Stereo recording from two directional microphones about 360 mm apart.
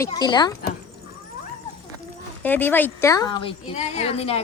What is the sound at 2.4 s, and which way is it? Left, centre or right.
A woman's voice, centre.